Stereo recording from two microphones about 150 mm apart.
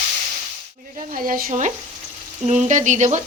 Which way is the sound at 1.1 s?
65° right (ahead or behind).